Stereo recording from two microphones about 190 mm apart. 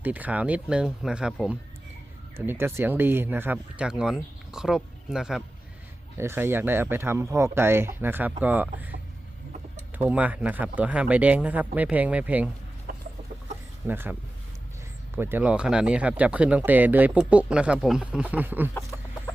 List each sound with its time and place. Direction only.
0.0 s speech: 10° right (ahead or behind)
10.1 s speech: 10° right (ahead or behind)
12.9 s chicken: 45° right (ahead or behind)
13.8 s speech: 10° right (ahead or behind)